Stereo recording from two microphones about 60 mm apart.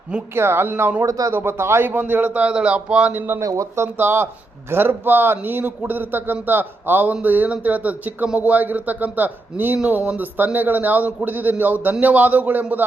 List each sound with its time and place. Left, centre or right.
0.3 s a man's voice: right
1.0 s speech: right
1.3 s speech: right
1.9 s a man's voice: right
2.5 s speech: centre
3.1 s a man's voice: right
3.4 s speech: right
3.9 s a man's voice: right